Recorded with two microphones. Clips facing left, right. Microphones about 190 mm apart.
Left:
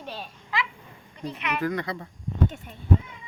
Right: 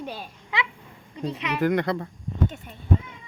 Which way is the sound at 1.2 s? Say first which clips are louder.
Right 2 dB; 30° right (ahead or behind).